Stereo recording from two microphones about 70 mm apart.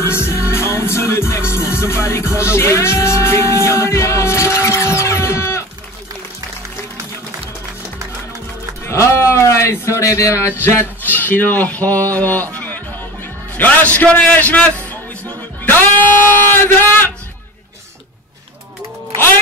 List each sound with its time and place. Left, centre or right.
0.0 s music: left
8.8 s a sound: left
10.6 s speech: left
13.6 s speech: left